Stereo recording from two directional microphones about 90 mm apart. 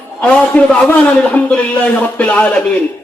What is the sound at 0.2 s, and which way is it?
Speech, 15° left (ahead or behind).